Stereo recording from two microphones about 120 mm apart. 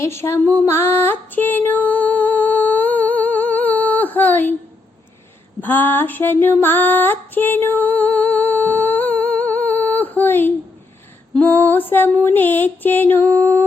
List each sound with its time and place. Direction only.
0.0 s music: 20° left (ahead or behind)
0.4 s female singing: 20° left (ahead or behind)
5.5 s female singing: 15° left (ahead or behind)